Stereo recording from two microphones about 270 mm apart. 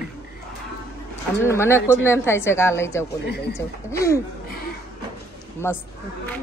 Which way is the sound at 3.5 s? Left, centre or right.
Centre.